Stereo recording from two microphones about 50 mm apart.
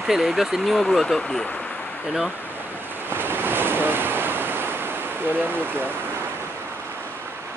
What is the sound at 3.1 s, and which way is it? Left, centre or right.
Waves, right.